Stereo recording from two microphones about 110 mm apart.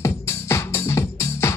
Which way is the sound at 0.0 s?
25° left (ahead or behind).